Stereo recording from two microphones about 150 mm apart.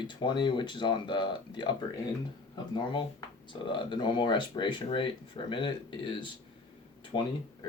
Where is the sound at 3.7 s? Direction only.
30° left (ahead or behind).